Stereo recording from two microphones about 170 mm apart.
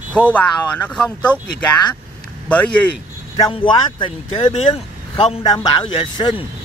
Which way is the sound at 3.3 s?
25° left (ahead or behind).